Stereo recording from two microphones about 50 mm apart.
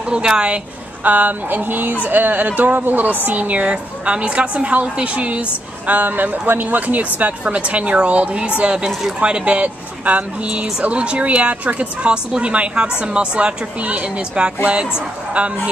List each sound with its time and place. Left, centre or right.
0.1 s a woman's voice: centre
1.0 s a woman's voice: right